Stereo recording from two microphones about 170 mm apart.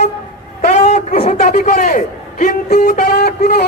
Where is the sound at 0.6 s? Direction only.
50° left (ahead or behind).